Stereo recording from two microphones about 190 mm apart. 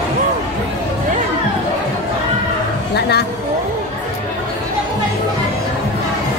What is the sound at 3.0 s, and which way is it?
Speech, 60° left (ahead or behind).